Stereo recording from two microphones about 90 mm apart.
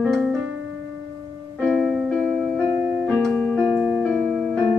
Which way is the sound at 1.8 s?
10° right (ahead or behind).